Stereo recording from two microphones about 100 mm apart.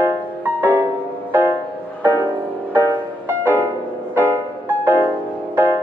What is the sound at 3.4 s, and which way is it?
Music, 20° right (ahead or behind).